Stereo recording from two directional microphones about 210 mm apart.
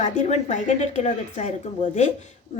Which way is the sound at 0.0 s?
35° left (ahead or behind).